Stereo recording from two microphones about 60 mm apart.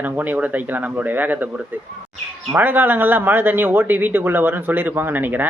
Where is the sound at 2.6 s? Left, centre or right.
Right.